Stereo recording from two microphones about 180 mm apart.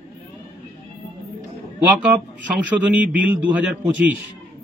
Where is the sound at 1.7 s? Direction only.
10° right (ahead or behind).